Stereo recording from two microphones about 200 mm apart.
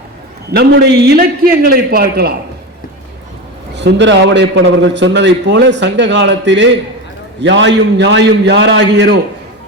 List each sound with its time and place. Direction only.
0.5 s a man's voice: 55° right (ahead or behind)
3.8 s a man's voice: 60° right (ahead or behind)